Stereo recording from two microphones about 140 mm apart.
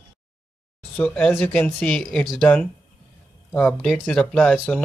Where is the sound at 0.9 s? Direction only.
10° left (ahead or behind).